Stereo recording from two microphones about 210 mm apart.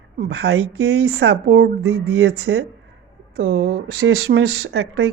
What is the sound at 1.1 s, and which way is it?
Speech, 50° right (ahead or behind).